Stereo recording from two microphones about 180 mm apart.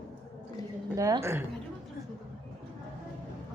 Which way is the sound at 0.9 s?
15° right (ahead or behind).